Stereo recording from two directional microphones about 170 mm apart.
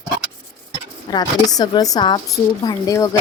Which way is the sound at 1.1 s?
25° left (ahead or behind).